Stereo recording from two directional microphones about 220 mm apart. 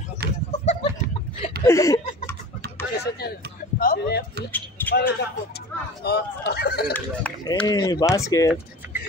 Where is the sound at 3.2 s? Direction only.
45° left (ahead or behind).